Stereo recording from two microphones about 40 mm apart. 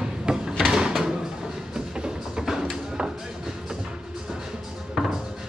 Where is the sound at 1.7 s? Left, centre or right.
Right.